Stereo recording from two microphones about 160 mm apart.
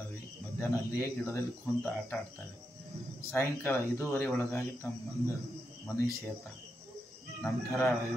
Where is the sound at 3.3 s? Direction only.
15° left (ahead or behind).